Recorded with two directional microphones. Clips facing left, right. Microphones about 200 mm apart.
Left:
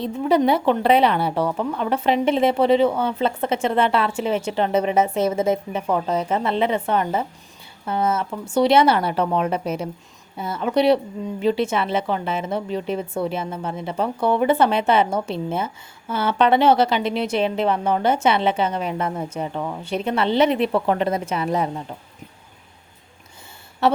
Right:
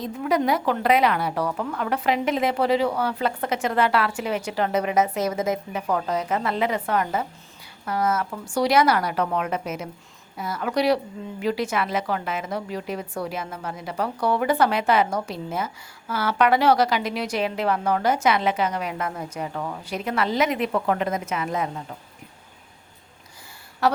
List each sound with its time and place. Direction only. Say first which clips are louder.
0.0 s a woman's voice: left 5 dB; 30° left (ahead or behind)
23.8 s a woman's voice: left 3 dB; 25° left (ahead or behind)